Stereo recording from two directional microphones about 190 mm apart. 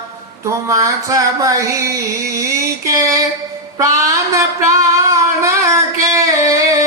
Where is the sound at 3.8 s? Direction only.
15° right (ahead or behind).